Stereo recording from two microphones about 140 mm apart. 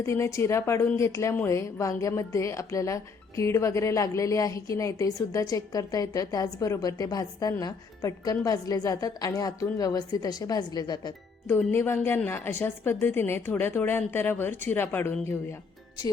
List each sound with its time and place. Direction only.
0.0 s a woman's voice: 20° left (ahead or behind)
11.4 s a woman's voice: 15° left (ahead or behind)